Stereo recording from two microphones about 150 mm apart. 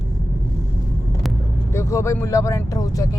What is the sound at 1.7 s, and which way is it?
Speech, 20° left (ahead or behind).